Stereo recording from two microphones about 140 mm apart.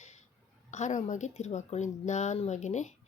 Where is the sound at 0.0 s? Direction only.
55° left (ahead or behind).